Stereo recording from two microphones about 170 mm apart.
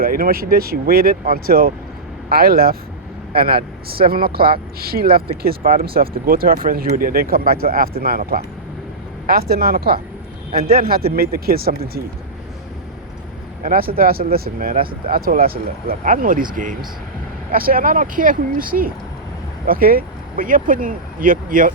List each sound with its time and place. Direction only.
0.0 s speech: 60° right (ahead or behind)
13.6 s speech: 55° right (ahead or behind)